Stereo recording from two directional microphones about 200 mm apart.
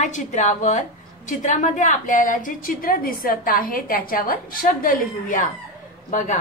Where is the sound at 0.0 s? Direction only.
35° left (ahead or behind).